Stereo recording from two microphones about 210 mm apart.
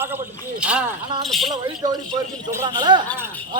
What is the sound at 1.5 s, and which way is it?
A man's voice, 20° right (ahead or behind).